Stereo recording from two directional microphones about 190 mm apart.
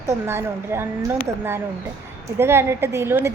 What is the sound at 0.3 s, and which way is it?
Speech, 10° right (ahead or behind).